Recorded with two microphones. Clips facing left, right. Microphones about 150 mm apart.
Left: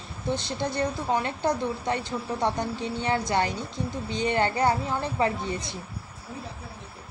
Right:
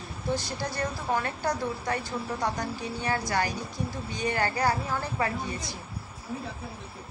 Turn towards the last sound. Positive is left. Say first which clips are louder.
# left 3 dB
turn(degrees=25)  # may be behind; listen again after turning